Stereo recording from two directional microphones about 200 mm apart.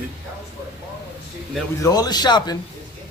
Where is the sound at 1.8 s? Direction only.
20° left (ahead or behind).